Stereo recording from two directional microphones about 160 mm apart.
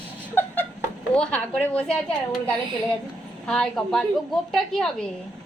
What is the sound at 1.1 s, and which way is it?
Speech, 5° left (ahead or behind).